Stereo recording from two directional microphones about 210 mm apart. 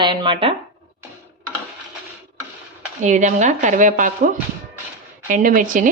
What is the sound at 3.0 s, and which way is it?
A woman's voice, 35° right (ahead or behind).